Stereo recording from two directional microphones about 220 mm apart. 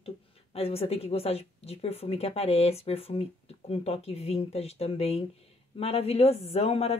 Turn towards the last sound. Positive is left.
turn(degrees=30)  # may be behind; listen again after turning